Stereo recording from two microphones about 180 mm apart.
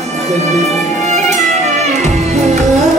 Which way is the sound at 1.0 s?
40° right (ahead or behind).